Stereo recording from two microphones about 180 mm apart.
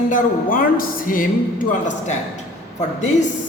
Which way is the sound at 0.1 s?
50° left (ahead or behind).